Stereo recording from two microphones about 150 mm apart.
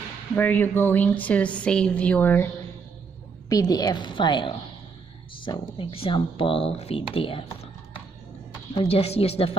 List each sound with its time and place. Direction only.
0.4 s a woman's voice: 10° left (ahead or behind)
3.4 s a woman's voice: 25° left (ahead or behind); by 9.6 s 40° left (ahead or behind)